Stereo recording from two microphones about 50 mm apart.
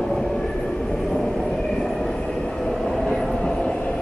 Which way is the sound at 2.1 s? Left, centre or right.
Centre.